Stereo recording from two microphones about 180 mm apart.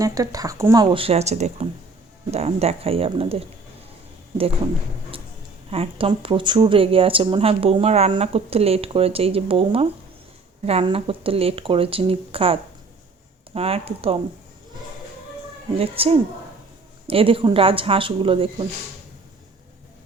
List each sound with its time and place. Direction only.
0.0 s speech: 20° right (ahead or behind)
0.9 s speech: 35° right (ahead or behind)
5.7 s speech: 30° right (ahead or behind)
15.8 s speech: 30° right (ahead or behind)